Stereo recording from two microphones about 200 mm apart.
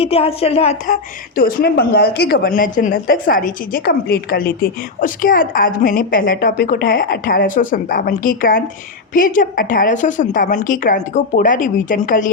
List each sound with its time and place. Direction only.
0.0 s a woman's voice: 30° left (ahead or behind)
1.4 s a woman's voice: 45° left (ahead or behind)